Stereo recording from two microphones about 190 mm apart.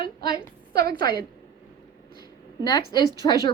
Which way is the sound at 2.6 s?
20° left (ahead or behind).